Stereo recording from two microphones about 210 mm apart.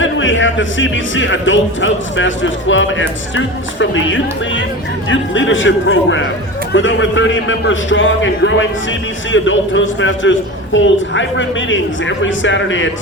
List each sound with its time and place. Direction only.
0.0 s speech: 65° left (ahead or behind)